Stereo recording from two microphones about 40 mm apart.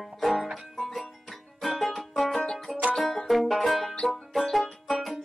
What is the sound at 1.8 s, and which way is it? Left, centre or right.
Music, centre.